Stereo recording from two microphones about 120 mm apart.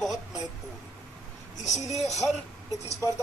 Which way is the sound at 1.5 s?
75° left (ahead or behind).